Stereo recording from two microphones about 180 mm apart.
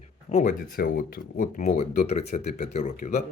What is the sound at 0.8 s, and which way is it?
Speech, 55° left (ahead or behind).